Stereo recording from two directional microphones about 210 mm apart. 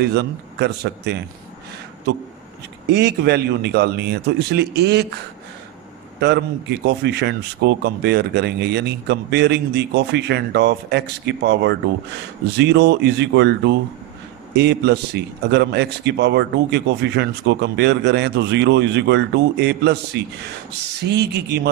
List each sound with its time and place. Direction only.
0.0 s a man's voice: 50° right (ahead or behind)
2.9 s a man's voice: 50° right (ahead or behind)